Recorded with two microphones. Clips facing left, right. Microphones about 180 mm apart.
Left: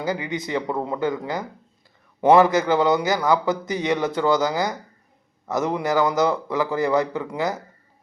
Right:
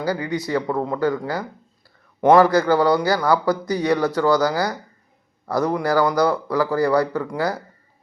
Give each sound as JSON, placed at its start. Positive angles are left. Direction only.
{"t": 0.0, "sound": "speech", "side_deg": 20}